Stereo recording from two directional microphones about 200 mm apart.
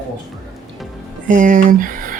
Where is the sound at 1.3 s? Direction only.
40° right (ahead or behind).